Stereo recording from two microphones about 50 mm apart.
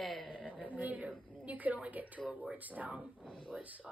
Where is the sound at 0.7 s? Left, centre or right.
Right.